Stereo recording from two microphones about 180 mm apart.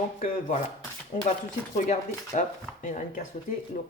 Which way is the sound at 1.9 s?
40° left (ahead or behind).